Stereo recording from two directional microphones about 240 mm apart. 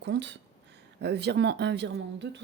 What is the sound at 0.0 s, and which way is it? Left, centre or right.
Speech, right.